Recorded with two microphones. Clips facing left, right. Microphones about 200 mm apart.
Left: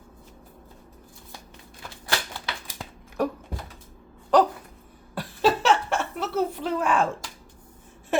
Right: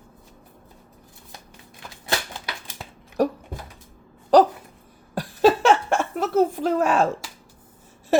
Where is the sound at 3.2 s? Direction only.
35° right (ahead or behind).